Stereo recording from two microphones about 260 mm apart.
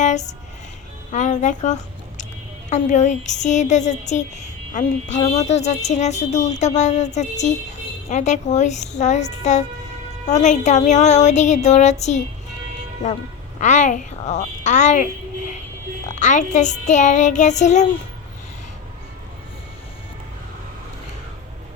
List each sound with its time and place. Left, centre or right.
1.1 s a woman's voice: left
13.6 s a woman's voice: left
16.2 s a woman's voice: left